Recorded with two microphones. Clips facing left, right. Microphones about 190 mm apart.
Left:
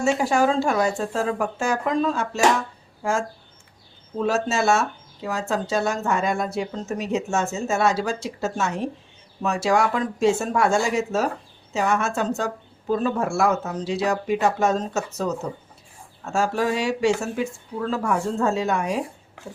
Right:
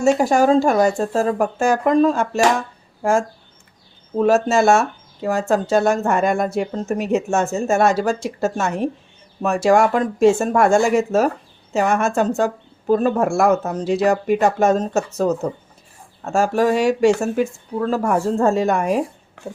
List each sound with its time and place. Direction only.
0.2 s speech: 45° right (ahead or behind)